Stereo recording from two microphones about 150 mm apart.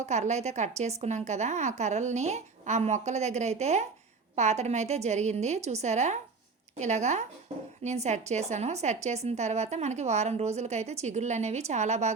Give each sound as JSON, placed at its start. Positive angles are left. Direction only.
{"t": 0.0, "sound": "a woman's voice", "side_deg": -50}